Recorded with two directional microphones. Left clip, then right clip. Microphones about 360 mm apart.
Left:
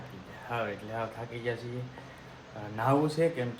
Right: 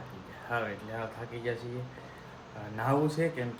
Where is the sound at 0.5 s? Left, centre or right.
Centre.